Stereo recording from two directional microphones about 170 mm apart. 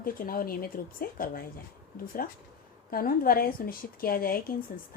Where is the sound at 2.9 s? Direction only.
60° left (ahead or behind).